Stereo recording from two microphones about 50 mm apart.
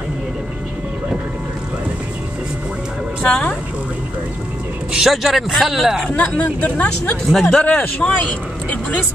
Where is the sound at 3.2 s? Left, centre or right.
Left.